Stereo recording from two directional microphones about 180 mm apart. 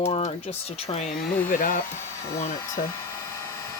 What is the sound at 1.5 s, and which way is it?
Speech, 50° left (ahead or behind).